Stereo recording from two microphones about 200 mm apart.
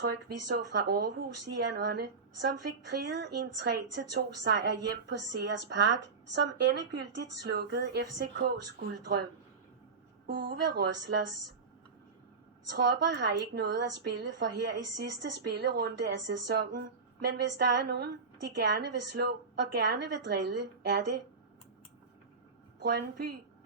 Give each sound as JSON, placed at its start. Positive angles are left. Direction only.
{"t": 0.0, "sound": "a woman's voice", "side_deg": -60}
{"t": 10.2, "sound": "a woman's voice", "side_deg": -60}
{"t": 12.6, "sound": "a woman's voice", "side_deg": -60}
{"t": 22.8, "sound": "a woman's voice", "side_deg": -55}